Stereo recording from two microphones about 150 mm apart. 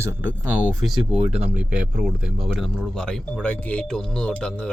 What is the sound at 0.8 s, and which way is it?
Speech, centre (ahead or behind).